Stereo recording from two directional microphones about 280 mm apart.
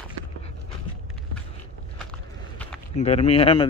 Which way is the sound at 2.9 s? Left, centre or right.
Left.